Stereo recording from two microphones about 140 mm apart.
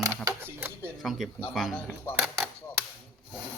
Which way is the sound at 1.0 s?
Centre (ahead or behind).